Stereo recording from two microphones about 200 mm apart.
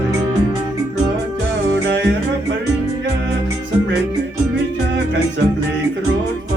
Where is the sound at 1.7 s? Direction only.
60° right (ahead or behind).